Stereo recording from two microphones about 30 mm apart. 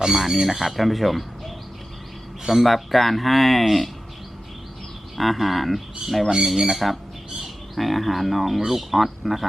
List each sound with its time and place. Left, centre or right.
0.0 s speech: centre
2.6 s speech: centre
5.1 s speech: centre